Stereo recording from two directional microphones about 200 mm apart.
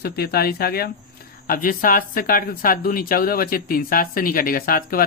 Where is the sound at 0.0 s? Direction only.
50° left (ahead or behind).